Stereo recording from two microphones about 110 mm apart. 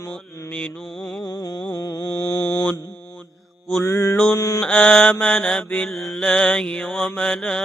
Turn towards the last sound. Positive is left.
turn(degrees=5)  # may be behind; listen again after turning